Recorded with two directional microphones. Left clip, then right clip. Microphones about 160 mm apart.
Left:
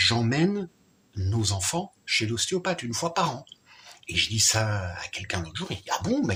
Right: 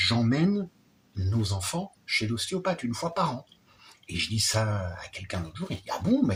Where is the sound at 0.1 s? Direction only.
20° left (ahead or behind).